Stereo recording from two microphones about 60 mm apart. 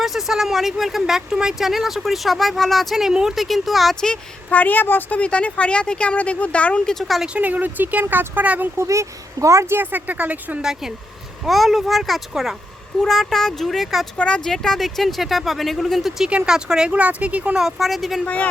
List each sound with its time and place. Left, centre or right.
0.0 s speech: centre
4.0 s a woman's voice: centre
4.5 s a woman's voice: left; by 7.0 s centre
7.3 s speech: right
8.8 s speech: right
9.7 s speech: right
10.6 s speech: centre
14.2 s speech: centre; by 17.6 s right
17.6 s speech: centre